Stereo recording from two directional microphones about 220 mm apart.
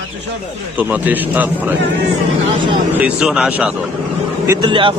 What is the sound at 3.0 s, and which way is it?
Speech, 5° right (ahead or behind).